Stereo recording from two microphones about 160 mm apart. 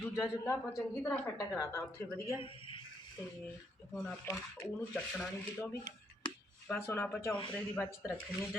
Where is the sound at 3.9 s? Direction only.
5° left (ahead or behind).